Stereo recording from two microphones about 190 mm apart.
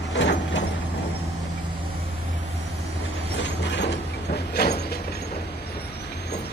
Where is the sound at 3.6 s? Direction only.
65° left (ahead or behind).